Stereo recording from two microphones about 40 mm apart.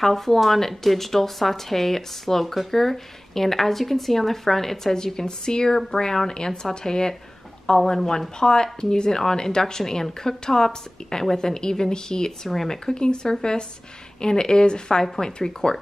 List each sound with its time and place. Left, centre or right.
0.0 s speech: centre